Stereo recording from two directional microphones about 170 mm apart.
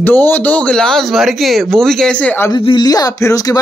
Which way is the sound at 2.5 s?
25° left (ahead or behind).